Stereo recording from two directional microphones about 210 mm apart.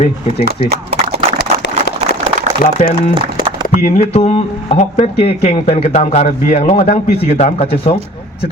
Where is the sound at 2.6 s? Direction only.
40° left (ahead or behind).